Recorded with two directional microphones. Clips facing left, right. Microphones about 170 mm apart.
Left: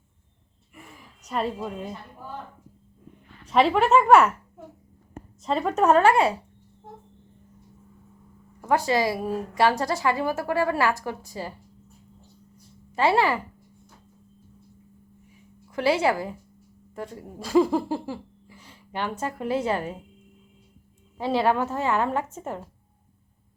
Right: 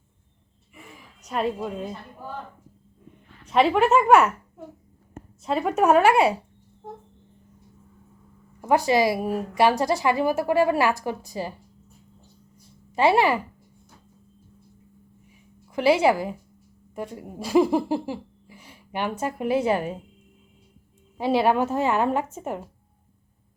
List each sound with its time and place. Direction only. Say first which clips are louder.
1.3 s speech: right 2 dB; centre (ahead or behind)
3.5 s speech: even; centre (ahead or behind)
5.4 s a woman's voice: right 1 dB; 5° right (ahead or behind)
8.6 s a woman's voice: right 3 dB; 15° right (ahead or behind)
12.9 s a woman's voice: right 2 dB; 15° right (ahead or behind)
15.7 s a woman's voice: right 3 dB; 15° right (ahead or behind)
21.2 s a woman's voice: right 2 dB; 15° right (ahead or behind)